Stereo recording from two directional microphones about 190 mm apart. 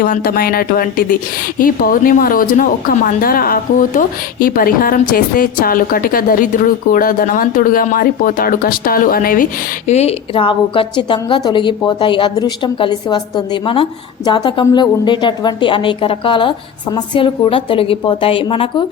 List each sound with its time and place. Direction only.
0.0 s a woman's voice: 50° left (ahead or behind); by 18.9 s 25° left (ahead or behind)